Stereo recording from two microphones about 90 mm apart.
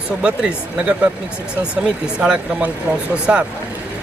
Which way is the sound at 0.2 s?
10° right (ahead or behind).